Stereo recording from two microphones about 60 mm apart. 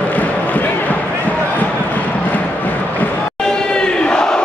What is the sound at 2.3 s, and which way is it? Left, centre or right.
Music, left.